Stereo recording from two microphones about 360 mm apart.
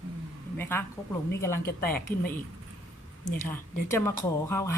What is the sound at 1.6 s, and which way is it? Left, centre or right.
Speech, left.